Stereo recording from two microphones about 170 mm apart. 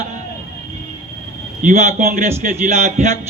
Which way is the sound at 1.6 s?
40° right (ahead or behind).